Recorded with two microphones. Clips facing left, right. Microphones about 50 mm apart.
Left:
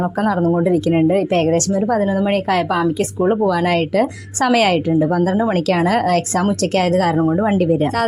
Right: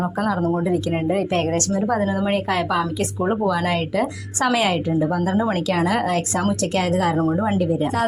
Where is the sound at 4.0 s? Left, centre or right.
Left.